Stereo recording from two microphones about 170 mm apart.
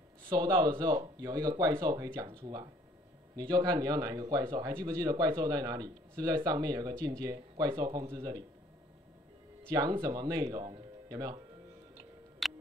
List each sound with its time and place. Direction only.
0.3 s speech: 25° right (ahead or behind)
9.7 s speech: 25° right (ahead or behind)
12.4 s music: centre (ahead or behind)